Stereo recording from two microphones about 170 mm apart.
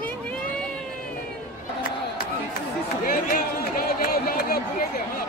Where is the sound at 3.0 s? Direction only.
55° left (ahead or behind).